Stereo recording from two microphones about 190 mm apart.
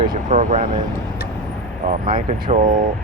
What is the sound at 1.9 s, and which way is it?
Speech, 45° right (ahead or behind).